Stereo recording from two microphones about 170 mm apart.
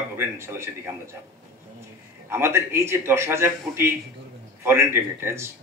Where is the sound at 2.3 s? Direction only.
15° right (ahead or behind).